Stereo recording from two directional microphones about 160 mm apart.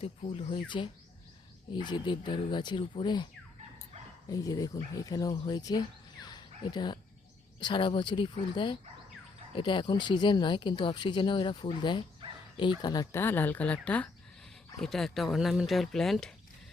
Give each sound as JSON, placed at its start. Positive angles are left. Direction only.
{"t": 0.0, "sound": "speech", "side_deg": 40}
{"t": 4.3, "sound": "speech", "side_deg": 20}
{"t": 6.2, "sound": "a sound", "side_deg": 25}
{"t": 7.6, "sound": "speech", "side_deg": 30}